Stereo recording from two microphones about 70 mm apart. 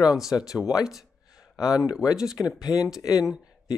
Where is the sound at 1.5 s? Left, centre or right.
Left.